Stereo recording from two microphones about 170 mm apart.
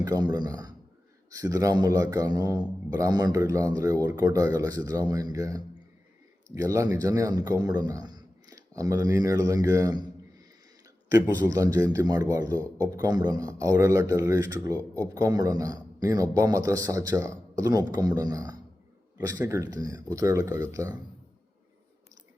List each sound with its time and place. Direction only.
0.0 s a man's voice: 25° right (ahead or behind)